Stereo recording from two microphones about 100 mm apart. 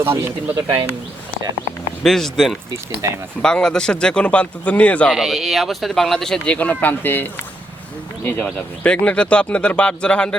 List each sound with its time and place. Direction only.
0.0 s speech: 25° right (ahead or behind)
2.0 s speech: 5° left (ahead or behind)
3.0 s speech: 30° right (ahead or behind)
3.4 s speech: 5° left (ahead or behind)
5.1 s speech: 5° right (ahead or behind)